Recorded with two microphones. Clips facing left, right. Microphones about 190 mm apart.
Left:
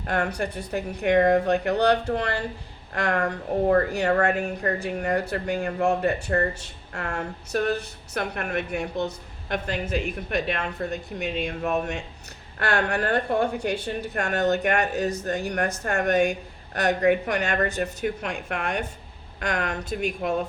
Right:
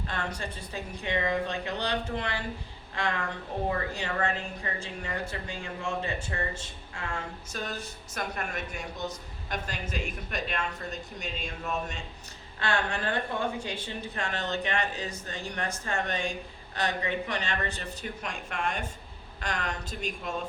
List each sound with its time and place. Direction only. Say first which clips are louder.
0.0 s a woman's voice: left 8 dB; 65° left (ahead or behind)